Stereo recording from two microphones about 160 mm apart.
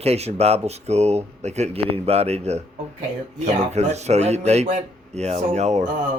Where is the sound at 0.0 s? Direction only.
40° right (ahead or behind).